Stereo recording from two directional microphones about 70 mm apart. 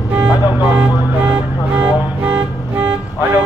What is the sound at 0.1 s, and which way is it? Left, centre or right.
Music, centre.